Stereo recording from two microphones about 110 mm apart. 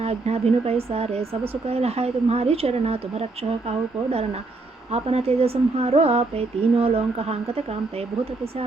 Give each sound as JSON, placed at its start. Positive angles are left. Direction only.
{"t": 0.0, "sound": "speech", "side_deg": -75}
{"t": 4.9, "sound": "speech", "side_deg": -65}